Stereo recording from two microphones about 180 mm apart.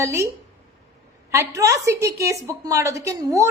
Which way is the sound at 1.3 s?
15° right (ahead or behind).